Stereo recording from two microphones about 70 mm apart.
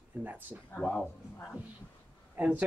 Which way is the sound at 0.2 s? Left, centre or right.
Right.